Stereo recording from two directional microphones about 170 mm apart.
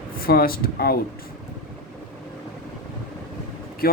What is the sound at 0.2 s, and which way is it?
Speech, 60° left (ahead or behind).